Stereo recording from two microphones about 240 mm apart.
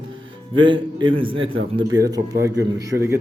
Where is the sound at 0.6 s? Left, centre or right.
Right.